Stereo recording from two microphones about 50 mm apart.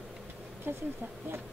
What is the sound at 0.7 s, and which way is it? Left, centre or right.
Speech, right.